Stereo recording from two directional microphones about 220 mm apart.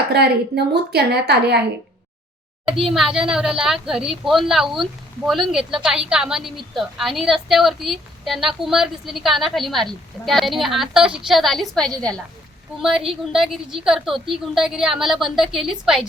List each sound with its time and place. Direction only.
0.1 s a woman's voice: 50° right (ahead or behind)
2.9 s a woman's voice: centre (ahead or behind)